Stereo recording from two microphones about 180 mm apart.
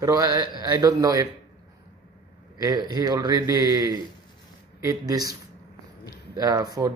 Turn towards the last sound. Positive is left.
turn(degrees=-20)  # may be behind; listen again after turning